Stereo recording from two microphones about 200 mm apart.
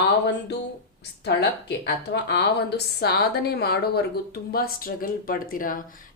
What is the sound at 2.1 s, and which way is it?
Speech, 60° left (ahead or behind).